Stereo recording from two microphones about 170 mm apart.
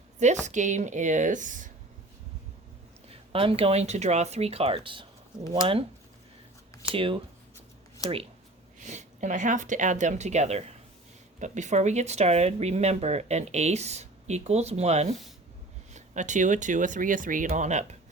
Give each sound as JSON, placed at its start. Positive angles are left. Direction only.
{"t": 0.2, "sound": "speech", "side_deg": -45}
{"t": 3.1, "sound": "speech", "side_deg": -35}
{"t": 6.9, "sound": "speech", "side_deg": -30}
{"t": 8.8, "sound": "speech", "side_deg": -45}